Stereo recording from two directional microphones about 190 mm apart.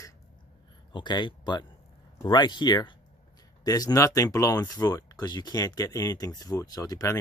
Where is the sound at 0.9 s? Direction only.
25° left (ahead or behind).